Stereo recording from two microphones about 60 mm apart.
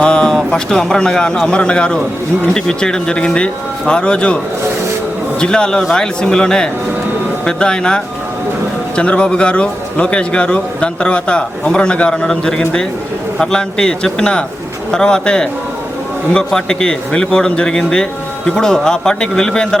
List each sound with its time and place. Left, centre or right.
0.0 s a man's voice: centre
5.4 s a man's voice: centre